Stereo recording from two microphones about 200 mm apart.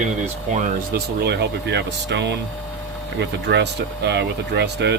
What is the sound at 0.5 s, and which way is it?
Speech, 45° right (ahead or behind).